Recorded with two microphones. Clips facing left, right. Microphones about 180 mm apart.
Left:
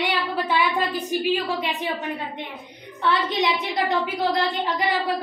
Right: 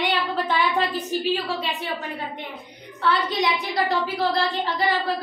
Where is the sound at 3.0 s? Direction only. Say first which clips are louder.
Even; 25° left (ahead or behind).